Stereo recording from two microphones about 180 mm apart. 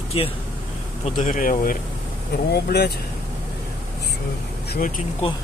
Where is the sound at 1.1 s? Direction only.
45° left (ahead or behind).